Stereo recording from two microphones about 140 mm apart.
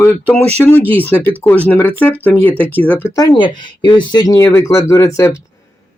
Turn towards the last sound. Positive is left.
turn(degrees=20)  # may be behind; listen again after turning